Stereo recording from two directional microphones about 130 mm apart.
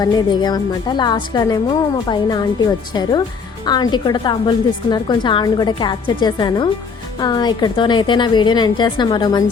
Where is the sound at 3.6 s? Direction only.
30° left (ahead or behind).